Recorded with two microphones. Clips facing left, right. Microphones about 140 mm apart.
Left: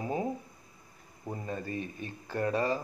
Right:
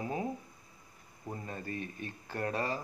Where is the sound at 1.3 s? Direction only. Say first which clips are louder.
Left 4 dB; 25° left (ahead or behind).